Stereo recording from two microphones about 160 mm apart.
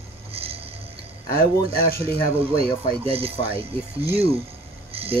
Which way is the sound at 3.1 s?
35° right (ahead or behind).